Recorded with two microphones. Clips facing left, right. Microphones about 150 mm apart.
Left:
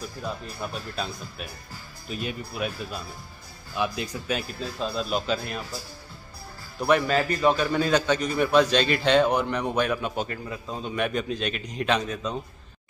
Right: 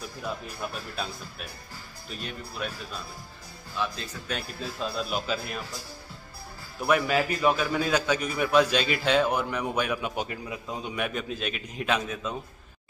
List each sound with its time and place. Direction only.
0.2 s speech: 5° right (ahead or behind); by 4.4 s 15° left (ahead or behind)
4.4 s speech: centre (ahead or behind)
6.8 s a man's voice: 5° right (ahead or behind)